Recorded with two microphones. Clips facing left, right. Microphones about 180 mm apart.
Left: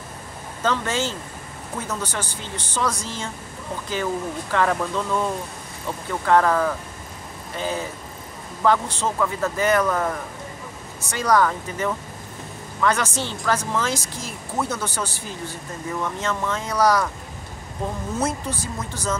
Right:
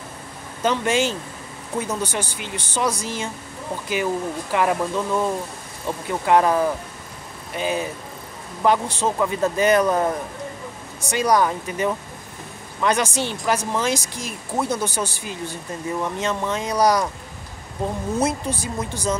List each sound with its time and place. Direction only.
0.6 s speech: 15° right (ahead or behind)
18.2 s speech: 15° right (ahead or behind)